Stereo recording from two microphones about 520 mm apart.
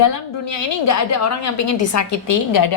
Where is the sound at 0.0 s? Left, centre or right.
Left.